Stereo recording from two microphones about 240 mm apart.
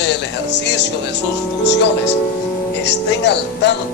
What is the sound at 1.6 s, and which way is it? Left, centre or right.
Speech, left.